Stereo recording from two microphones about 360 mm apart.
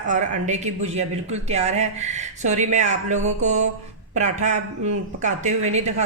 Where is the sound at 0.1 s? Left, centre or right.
Centre.